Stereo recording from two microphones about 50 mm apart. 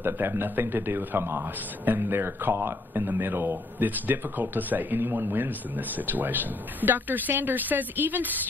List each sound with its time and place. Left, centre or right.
0.0 s speech: right